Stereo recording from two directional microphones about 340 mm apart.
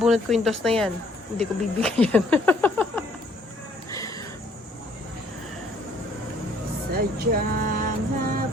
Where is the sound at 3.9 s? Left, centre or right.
Centre.